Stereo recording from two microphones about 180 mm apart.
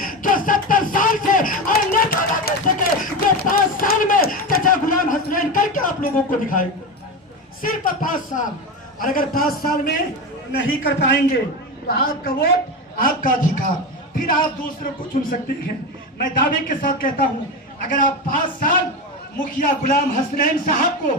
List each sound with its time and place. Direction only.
0.0 s a sound: 50° left (ahead or behind)
7.6 s a man's voice: 50° left (ahead or behind)
10.7 s a man's voice: 85° left
11.9 s a woman's voice: 55° left (ahead or behind)